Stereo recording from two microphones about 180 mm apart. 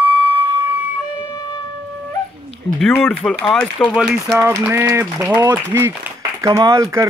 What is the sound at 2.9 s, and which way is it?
Speech, 10° left (ahead or behind).